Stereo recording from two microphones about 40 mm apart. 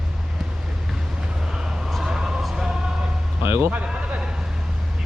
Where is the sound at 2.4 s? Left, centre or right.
Centre.